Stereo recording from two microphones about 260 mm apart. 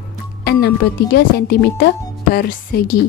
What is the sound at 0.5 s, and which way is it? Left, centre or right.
Speech, left.